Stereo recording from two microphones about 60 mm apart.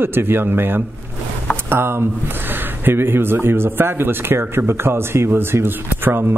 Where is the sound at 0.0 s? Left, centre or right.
Right.